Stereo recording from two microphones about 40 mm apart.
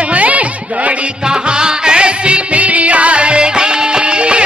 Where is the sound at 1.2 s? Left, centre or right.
Right.